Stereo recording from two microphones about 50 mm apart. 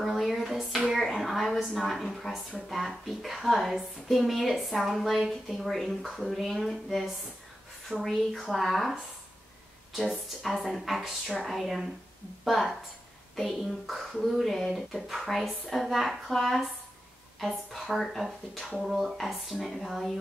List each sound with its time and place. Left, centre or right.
0.0 s a sound: centre
2.7 s speech: centre
9.9 s speech: centre